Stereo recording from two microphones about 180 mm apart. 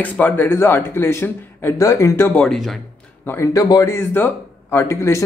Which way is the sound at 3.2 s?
15° left (ahead or behind).